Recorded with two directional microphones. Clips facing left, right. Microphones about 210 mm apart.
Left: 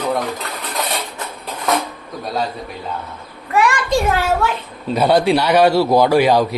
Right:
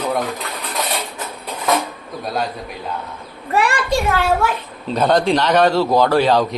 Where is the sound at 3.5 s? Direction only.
35° right (ahead or behind).